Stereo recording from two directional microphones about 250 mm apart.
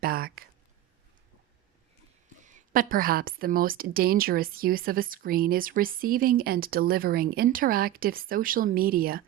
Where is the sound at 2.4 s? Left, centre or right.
Right.